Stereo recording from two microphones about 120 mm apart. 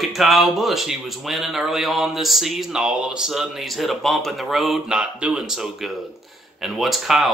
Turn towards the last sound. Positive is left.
turn(degrees=0)  # may be behind; listen again after turning